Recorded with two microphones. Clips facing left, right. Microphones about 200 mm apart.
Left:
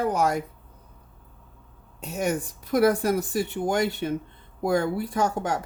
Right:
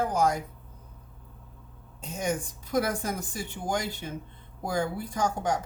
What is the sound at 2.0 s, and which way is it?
Speech, 65° left (ahead or behind).